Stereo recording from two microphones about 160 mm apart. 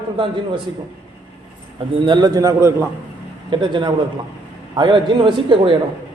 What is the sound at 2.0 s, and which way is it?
Speech, 25° right (ahead or behind).